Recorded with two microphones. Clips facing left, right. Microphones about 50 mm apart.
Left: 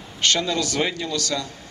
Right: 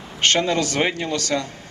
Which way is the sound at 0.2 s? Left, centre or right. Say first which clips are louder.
Right 3 dB; right.